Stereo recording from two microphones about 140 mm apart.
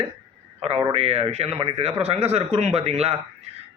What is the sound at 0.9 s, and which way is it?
A man's voice, 45° right (ahead or behind).